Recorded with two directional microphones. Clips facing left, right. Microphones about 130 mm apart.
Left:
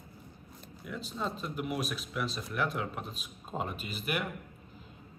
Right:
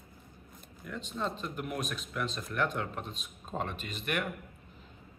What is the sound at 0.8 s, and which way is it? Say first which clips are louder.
Speech: right 1 dB; 5° left (ahead or behind).